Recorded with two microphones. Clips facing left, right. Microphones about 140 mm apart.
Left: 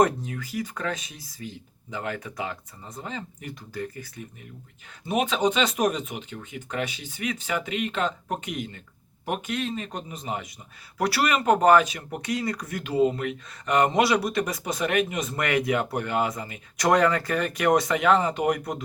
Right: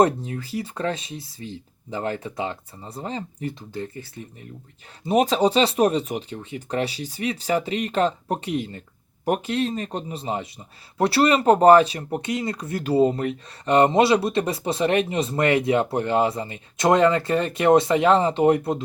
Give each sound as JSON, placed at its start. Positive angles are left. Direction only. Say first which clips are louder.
{"t": 0.0, "sound": "speech", "louder": "right 3 dB", "side_deg": -30}
{"t": 5.0, "sound": "speech", "louder": "right 5 dB", "side_deg": -35}